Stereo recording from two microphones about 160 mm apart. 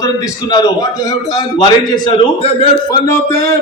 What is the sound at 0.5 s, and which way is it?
A man's voice, 25° left (ahead or behind).